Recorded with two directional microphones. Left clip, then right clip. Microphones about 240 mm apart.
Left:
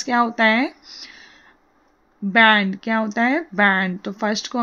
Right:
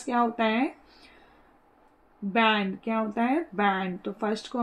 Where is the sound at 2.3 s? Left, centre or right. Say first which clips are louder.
Left 10 dB; left.